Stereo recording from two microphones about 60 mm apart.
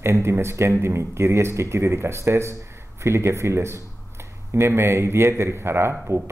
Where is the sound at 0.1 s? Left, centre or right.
Right.